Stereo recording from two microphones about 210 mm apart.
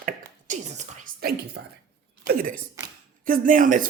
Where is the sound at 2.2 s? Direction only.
45° right (ahead or behind).